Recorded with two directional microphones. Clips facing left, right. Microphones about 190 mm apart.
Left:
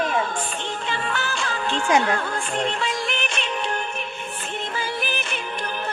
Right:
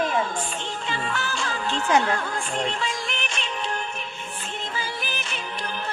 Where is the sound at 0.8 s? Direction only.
60° left (ahead or behind).